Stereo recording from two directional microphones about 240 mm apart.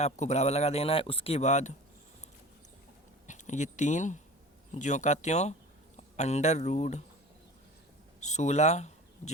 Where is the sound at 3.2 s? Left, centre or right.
Left.